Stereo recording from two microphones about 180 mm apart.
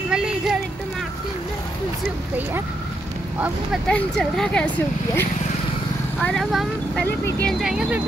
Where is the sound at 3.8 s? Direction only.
5° left (ahead or behind).